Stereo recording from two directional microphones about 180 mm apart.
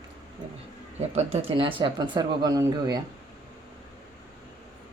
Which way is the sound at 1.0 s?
35° right (ahead or behind).